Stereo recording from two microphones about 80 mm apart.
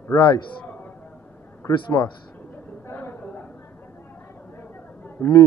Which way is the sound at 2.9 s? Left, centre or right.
Left.